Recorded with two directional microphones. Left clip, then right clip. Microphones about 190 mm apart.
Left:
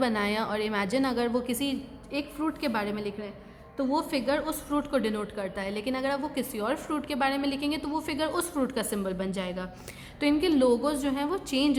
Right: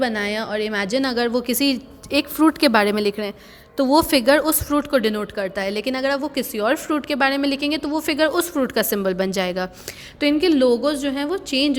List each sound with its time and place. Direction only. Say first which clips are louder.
0.0 s a woman's voice: right 5 dB; 15° right (ahead or behind); by 9.6 s 35° right (ahead or behind)
10.2 s a woman's voice: right 7 dB; 20° right (ahead or behind)